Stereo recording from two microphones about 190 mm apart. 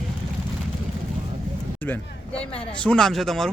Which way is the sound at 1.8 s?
10° left (ahead or behind).